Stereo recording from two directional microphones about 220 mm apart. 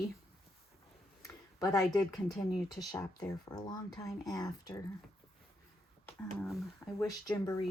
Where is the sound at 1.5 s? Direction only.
15° left (ahead or behind).